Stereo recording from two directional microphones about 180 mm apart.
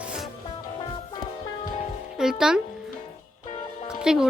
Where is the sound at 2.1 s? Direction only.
5° right (ahead or behind).